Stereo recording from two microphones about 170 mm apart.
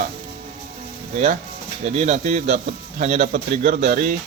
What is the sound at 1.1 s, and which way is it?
A man's voice, 45° right (ahead or behind).